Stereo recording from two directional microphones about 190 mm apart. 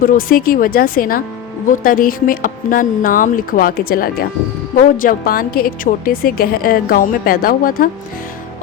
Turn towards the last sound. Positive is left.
turn(degrees=50)  # may be behind; listen again after turning